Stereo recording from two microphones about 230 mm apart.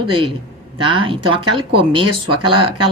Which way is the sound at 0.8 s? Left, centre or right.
Right.